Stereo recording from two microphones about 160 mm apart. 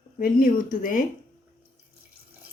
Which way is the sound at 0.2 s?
60° left (ahead or behind).